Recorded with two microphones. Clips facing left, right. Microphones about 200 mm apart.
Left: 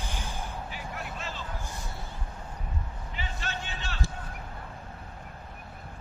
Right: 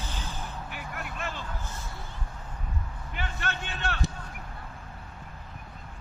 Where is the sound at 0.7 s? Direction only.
55° right (ahead or behind).